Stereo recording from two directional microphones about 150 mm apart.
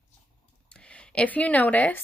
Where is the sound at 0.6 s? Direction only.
5° left (ahead or behind).